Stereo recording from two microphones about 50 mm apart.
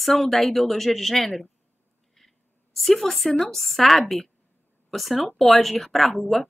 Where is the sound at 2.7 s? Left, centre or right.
Centre.